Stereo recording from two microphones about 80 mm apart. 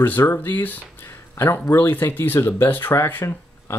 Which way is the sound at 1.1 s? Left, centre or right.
Left.